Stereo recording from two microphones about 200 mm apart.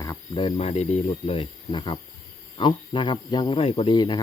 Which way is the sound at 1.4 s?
25° left (ahead or behind).